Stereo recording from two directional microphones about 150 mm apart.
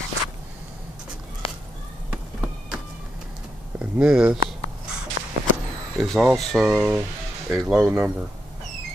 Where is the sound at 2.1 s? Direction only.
5° right (ahead or behind).